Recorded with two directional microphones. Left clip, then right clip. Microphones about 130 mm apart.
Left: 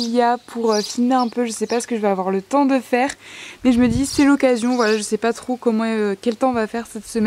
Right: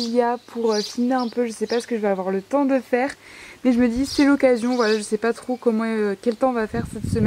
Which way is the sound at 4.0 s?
20° left (ahead or behind).